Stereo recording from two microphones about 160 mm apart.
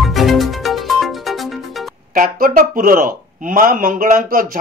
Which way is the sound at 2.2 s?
60° right (ahead or behind).